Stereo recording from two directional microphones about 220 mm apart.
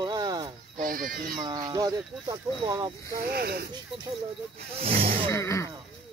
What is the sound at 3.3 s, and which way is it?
Speech, 45° right (ahead or behind).